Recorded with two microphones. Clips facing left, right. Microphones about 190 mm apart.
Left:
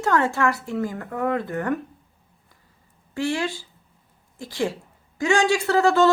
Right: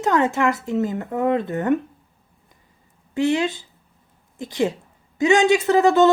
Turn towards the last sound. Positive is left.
turn(degrees=-20)  # may be behind; listen again after turning